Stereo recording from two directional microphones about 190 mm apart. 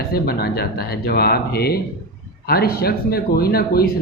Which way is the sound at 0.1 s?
55° left (ahead or behind).